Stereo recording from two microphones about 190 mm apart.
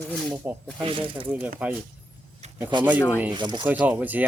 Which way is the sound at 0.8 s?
25° right (ahead or behind).